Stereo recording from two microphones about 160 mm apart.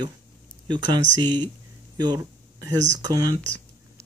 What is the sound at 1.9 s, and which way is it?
Speech, 25° right (ahead or behind).